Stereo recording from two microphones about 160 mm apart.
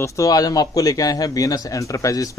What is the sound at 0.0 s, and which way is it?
A man's voice, 20° left (ahead or behind).